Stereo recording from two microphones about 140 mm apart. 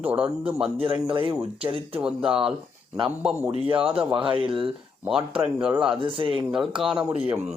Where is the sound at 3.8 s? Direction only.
40° right (ahead or behind).